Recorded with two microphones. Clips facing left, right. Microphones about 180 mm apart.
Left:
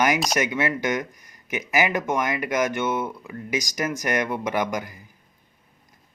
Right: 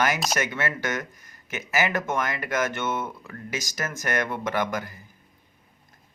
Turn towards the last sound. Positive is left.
turn(degrees=15)  # may be behind; listen again after turning